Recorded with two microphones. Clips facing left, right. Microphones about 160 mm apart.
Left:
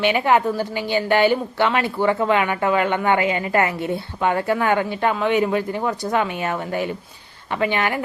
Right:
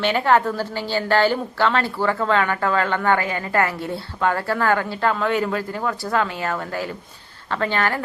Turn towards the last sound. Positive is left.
turn(degrees=15)  # may be behind; listen again after turning